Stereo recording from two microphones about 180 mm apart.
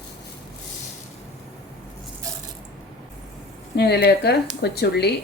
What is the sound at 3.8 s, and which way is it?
Speech, 65° left (ahead or behind).